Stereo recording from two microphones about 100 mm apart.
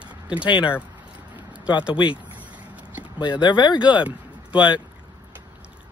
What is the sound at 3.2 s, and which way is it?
Speech, 50° left (ahead or behind).